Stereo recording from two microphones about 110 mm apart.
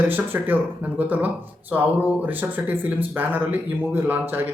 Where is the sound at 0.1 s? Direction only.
15° right (ahead or behind).